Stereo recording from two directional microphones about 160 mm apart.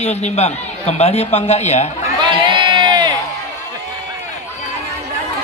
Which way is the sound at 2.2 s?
30° right (ahead or behind).